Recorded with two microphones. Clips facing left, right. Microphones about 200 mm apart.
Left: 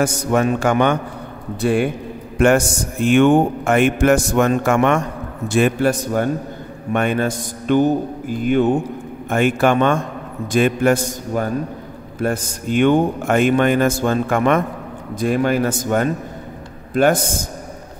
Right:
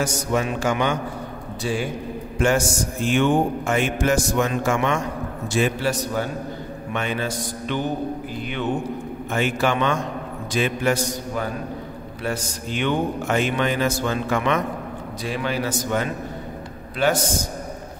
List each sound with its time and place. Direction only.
0.0 s speech: 55° left (ahead or behind)